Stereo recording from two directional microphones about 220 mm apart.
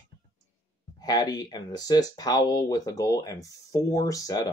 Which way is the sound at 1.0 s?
15° left (ahead or behind).